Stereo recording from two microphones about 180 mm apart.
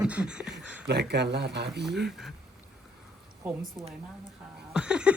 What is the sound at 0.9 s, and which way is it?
Speech, 65° right (ahead or behind).